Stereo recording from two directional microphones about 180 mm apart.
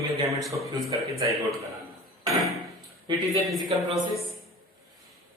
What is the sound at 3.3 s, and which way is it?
Speech, centre (ahead or behind).